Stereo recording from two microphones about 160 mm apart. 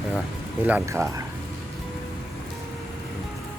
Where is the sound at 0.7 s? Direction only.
20° right (ahead or behind).